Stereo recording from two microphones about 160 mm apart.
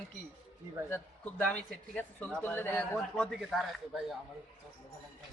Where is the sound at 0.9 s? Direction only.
10° left (ahead or behind).